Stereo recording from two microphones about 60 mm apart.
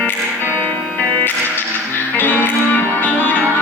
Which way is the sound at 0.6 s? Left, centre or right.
Left.